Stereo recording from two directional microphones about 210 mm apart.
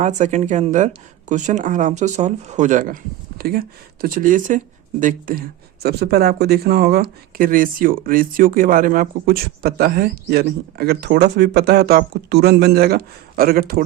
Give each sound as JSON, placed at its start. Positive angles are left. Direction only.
{"t": 0.0, "sound": "speech", "side_deg": -35}